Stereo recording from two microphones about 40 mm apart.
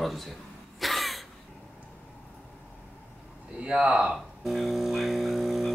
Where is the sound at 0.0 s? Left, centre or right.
Centre.